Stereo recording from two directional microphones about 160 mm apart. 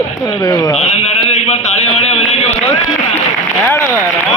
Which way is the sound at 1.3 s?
45° left (ahead or behind).